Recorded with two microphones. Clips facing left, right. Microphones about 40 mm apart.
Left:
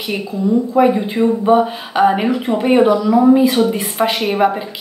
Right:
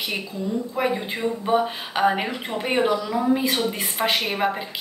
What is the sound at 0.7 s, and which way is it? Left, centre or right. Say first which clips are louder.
A woman's voice: left 11 dB; centre.